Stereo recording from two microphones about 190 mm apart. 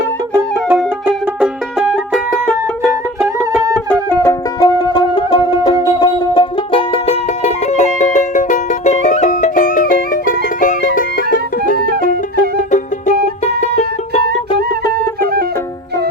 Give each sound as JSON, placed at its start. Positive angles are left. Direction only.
{"t": 0.3, "sound": "music", "side_deg": -15}
{"t": 4.1, "sound": "music", "side_deg": 15}
{"t": 14.8, "sound": "music", "side_deg": 15}